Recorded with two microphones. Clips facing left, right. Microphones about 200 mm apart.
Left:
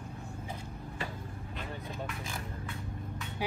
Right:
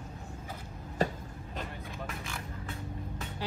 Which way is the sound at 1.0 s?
40° right (ahead or behind).